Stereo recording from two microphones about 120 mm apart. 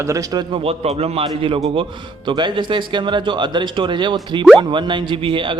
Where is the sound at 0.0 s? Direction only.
30° right (ahead or behind).